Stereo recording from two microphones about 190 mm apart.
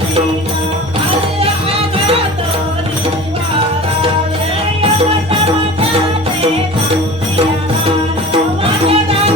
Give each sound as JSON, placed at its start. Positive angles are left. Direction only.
{"t": 4.8, "sound": "music", "side_deg": -30}
{"t": 8.3, "sound": "music", "side_deg": -30}